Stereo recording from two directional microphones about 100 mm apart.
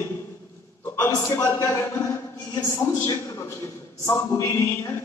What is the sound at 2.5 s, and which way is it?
Speech, 40° left (ahead or behind).